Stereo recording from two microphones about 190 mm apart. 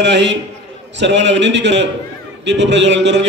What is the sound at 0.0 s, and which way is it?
A man's voice, 65° right (ahead or behind).